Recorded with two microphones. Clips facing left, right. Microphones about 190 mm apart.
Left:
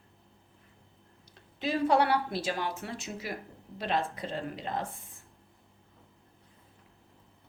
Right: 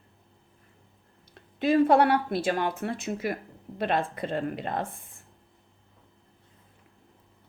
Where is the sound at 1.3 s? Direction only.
55° right (ahead or behind).